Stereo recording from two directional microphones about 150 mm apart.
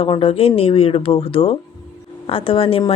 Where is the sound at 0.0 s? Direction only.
35° left (ahead or behind).